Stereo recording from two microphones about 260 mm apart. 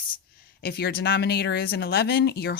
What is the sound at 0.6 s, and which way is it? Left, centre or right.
Speech, left.